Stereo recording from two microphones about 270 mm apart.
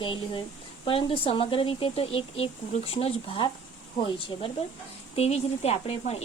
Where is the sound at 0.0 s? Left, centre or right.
Centre.